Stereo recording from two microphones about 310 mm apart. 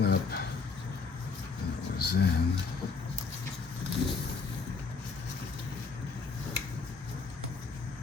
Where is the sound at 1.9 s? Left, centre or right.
Left.